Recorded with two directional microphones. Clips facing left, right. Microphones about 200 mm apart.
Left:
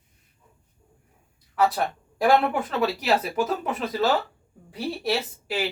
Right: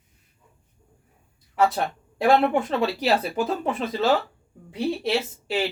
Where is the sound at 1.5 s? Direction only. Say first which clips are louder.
Right 1 dB; 25° right (ahead or behind).